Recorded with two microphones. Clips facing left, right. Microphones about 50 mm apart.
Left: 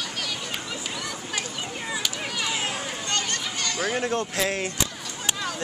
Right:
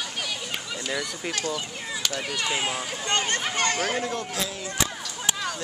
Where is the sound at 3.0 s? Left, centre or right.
Right.